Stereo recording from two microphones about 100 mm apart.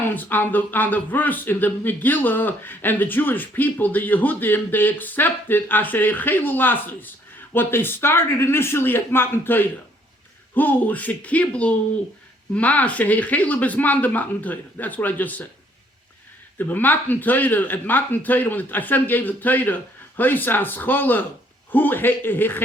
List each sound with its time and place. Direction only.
0.1 s speech: 20° left (ahead or behind)
16.6 s speech: 15° left (ahead or behind)